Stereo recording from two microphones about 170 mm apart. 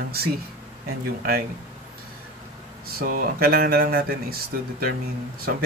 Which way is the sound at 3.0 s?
60° right (ahead or behind).